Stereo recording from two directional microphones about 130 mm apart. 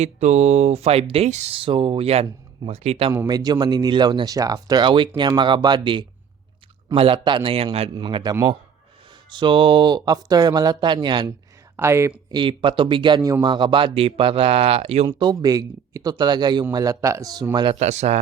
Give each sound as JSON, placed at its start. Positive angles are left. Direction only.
{"t": 0.0, "sound": "speech", "side_deg": -60}
{"t": 3.1, "sound": "speech", "side_deg": -30}
{"t": 11.8, "sound": "speech", "side_deg": -20}
{"t": 12.3, "sound": "speech", "side_deg": -40}
{"t": 15.0, "sound": "speech", "side_deg": -30}
{"t": 17.5, "sound": "speech", "side_deg": -35}
{"t": 17.7, "sound": "speech", "side_deg": -60}